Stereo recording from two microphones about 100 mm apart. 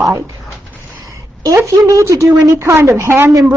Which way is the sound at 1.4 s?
30° right (ahead or behind).